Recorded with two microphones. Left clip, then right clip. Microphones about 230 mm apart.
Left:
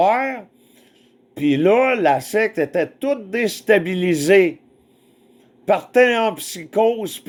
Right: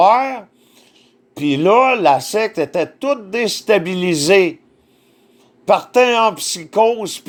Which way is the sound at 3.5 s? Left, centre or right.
Centre.